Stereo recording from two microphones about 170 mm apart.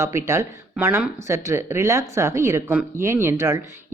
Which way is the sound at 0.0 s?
15° right (ahead or behind).